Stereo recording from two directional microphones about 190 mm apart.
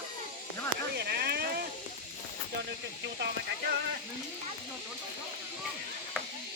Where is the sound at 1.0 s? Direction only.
55° right (ahead or behind).